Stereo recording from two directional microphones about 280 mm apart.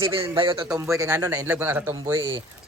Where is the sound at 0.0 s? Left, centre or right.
Centre.